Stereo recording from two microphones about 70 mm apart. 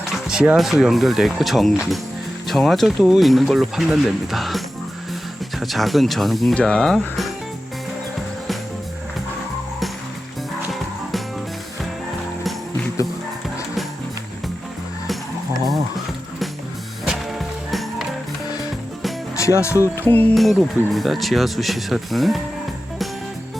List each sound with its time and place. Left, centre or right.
0.3 s music: centre
0.5 s speech: centre
6.5 s speech: centre
17.1 s music: centre
19.4 s speech: left
20.0 s music: left
20.3 s speech: centre